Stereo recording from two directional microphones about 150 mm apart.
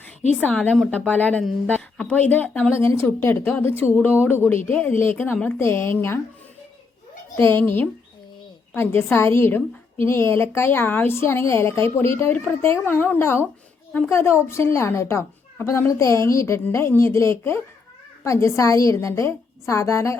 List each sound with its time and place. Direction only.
0.3 s a woman's voice: 10° left (ahead or behind)
7.3 s a woman's voice: 15° left (ahead or behind)